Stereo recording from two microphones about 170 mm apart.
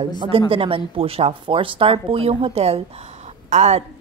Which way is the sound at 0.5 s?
30° right (ahead or behind).